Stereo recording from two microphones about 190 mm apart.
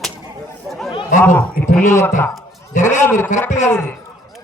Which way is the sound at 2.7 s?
40° left (ahead or behind).